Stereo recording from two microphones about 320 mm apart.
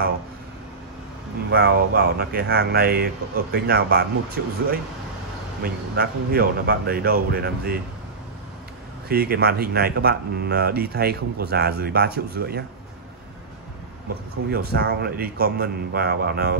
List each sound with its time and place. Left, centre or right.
1.5 s speech: right
9.1 s speech: right
14.5 s speech: right